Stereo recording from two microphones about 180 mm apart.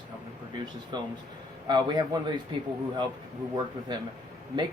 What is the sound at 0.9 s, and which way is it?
Speech, 25° right (ahead or behind).